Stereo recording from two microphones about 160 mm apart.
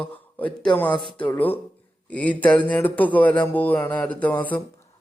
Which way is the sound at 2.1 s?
10° left (ahead or behind).